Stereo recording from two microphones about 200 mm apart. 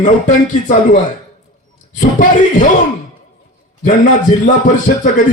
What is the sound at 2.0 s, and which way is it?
Speech, 40° left (ahead or behind).